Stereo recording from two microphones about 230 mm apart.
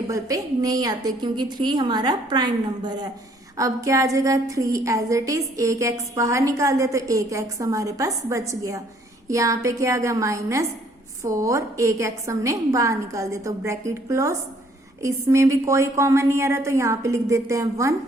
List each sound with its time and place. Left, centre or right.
0.1 s a woman's voice: centre